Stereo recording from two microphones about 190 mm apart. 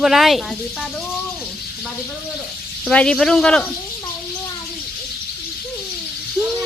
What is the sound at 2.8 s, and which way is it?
Speech, 5° left (ahead or behind).